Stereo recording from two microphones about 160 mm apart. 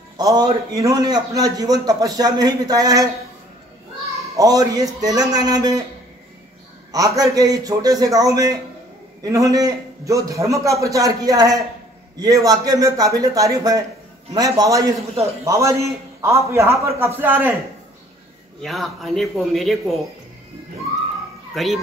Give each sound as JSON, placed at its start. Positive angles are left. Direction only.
{"t": 0.2, "sound": "a man's voice", "side_deg": -25}
{"t": 4.4, "sound": "a man's voice", "side_deg": -20}
{"t": 6.9, "sound": "a man's voice", "side_deg": -25}
{"t": 18.6, "sound": "a man's voice", "side_deg": 0}
{"t": 21.5, "sound": "a man's voice", "side_deg": 0}